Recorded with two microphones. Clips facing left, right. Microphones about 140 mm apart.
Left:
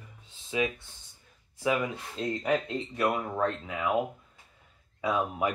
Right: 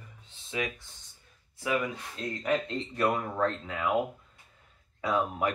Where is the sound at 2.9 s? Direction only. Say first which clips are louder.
Even; 5° left (ahead or behind).